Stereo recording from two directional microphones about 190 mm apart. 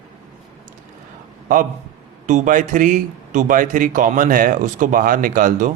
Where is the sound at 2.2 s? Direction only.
40° right (ahead or behind).